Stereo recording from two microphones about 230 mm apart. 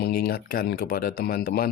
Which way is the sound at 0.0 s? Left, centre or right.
Left.